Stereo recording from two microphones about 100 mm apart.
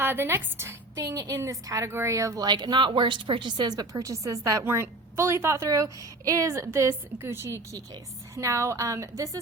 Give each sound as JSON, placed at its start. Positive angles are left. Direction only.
{"t": 0.0, "sound": "a woman's voice", "side_deg": -20}
{"t": 0.9, "sound": "a woman's voice", "side_deg": -35}
{"t": 2.5, "sound": "a woman's voice", "side_deg": -50}